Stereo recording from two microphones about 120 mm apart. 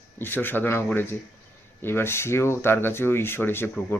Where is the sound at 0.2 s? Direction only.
15° left (ahead or behind).